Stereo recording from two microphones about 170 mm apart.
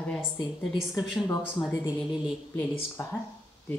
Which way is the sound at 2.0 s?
Centre (ahead or behind).